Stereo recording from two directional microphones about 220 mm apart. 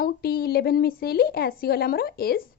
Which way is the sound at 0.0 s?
45° left (ahead or behind).